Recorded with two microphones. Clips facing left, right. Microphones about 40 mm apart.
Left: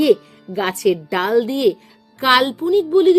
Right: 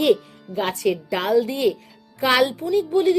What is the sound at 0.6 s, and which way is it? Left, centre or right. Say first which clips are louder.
Speech: left 4 dB; left.